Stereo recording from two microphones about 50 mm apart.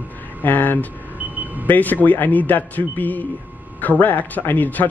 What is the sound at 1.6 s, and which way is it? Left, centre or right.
Speech, left.